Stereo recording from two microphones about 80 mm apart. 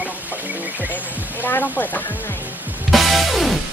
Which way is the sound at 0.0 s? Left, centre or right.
Right.